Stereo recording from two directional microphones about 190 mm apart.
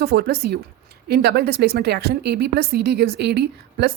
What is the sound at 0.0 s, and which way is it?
A woman's voice, 55° right (ahead or behind).